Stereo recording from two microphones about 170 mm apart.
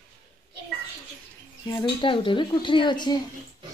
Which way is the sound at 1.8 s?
30° left (ahead or behind).